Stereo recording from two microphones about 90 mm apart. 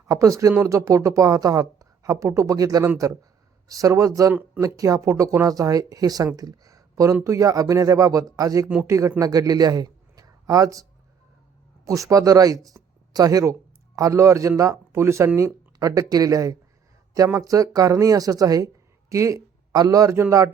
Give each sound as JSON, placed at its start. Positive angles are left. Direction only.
{"t": 0.1, "sound": "a man's voice", "side_deg": -35}
{"t": 11.9, "sound": "speech", "side_deg": -35}